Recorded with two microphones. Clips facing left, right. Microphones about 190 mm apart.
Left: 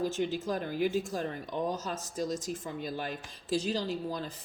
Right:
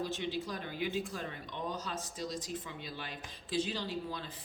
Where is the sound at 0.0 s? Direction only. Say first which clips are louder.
Left 5 dB; 45° left (ahead or behind).